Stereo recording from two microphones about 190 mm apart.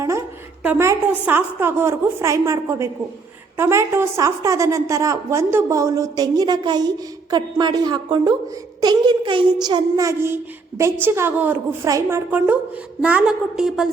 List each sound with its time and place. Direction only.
0.0 s a woman's voice: 15° right (ahead or behind)